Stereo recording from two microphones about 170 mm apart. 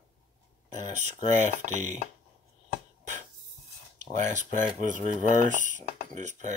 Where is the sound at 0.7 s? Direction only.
45° right (ahead or behind).